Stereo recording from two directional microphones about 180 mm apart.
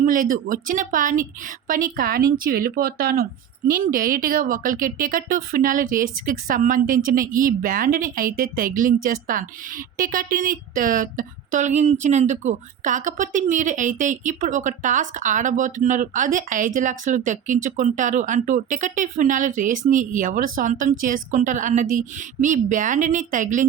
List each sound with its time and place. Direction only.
0.0 s speech: 50° right (ahead or behind)